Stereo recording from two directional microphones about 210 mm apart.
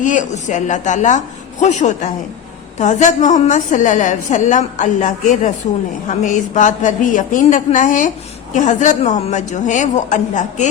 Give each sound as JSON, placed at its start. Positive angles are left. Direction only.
{"t": 0.0, "sound": "a woman's voice", "side_deg": 35}